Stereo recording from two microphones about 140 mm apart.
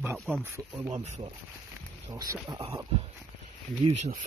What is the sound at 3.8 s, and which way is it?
Speech, 50° right (ahead or behind).